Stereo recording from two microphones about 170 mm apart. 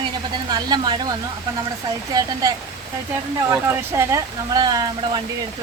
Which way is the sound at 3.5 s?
15° right (ahead or behind).